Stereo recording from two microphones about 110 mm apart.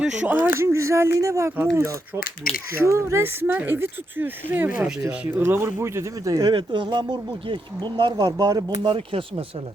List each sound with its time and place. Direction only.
0.0 s speech: 10° right (ahead or behind); by 6.4 s 30° right (ahead or behind)
6.4 s speech: 45° right (ahead or behind)
8.8 s speech: 50° right (ahead or behind)